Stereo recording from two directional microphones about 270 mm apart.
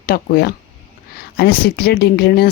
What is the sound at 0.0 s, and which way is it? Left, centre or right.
Speech, left.